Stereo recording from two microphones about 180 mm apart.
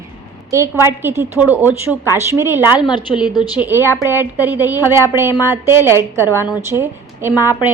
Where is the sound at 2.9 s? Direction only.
25° left (ahead or behind).